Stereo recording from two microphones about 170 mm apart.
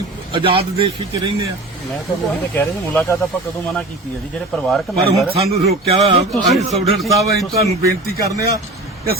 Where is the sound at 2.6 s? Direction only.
15° left (ahead or behind).